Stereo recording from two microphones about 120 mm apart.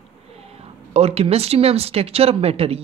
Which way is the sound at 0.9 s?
60° right (ahead or behind).